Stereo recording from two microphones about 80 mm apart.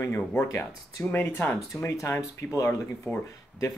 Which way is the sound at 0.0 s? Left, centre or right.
Left.